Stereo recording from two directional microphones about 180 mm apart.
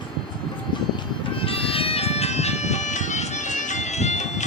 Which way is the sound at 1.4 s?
30° left (ahead or behind).